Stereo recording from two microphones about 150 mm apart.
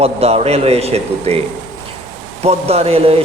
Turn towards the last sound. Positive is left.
turn(degrees=-40)  # may be behind; listen again after turning